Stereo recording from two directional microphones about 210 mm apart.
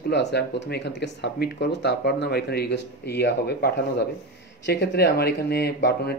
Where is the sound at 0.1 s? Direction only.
55° left (ahead or behind).